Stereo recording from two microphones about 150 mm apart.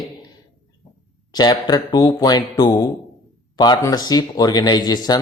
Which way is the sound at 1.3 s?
25° left (ahead or behind).